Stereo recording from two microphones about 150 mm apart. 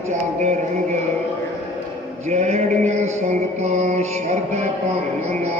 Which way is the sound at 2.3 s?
50° right (ahead or behind).